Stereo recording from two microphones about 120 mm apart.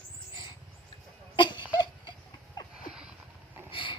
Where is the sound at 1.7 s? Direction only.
35° left (ahead or behind).